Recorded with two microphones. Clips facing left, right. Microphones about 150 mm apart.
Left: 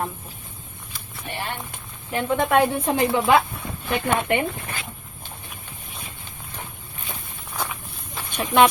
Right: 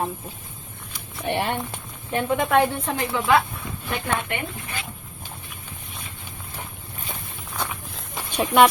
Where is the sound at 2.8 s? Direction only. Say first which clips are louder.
Left 4 dB; 25° left (ahead or behind).